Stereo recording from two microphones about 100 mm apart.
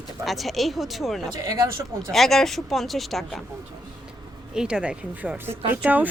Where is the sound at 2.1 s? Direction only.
Centre (ahead or behind).